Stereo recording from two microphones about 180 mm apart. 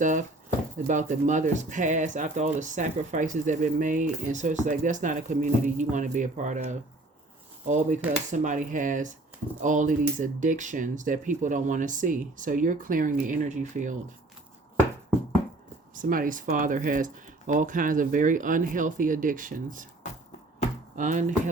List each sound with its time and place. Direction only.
0.0 s speech: 45° right (ahead or behind)
16.0 s speech: 50° right (ahead or behind)
20.9 s speech: 45° right (ahead or behind)